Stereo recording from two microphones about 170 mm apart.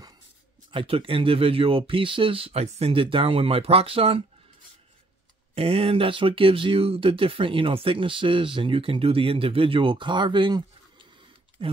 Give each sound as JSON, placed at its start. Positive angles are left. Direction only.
{"t": 0.7, "sound": "speech", "side_deg": -30}
{"t": 5.5, "sound": "speech", "side_deg": -35}
{"t": 11.6, "sound": "speech", "side_deg": -30}